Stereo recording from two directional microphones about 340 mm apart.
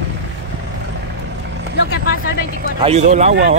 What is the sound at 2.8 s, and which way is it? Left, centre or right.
Speech, centre.